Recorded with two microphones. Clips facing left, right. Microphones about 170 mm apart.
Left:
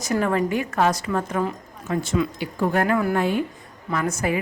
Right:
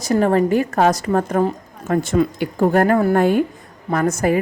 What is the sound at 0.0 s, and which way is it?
A woman's voice, 35° right (ahead or behind).